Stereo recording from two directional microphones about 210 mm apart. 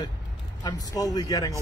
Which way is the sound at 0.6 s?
20° left (ahead or behind).